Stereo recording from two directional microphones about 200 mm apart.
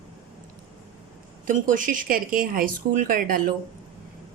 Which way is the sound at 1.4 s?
40° right (ahead or behind).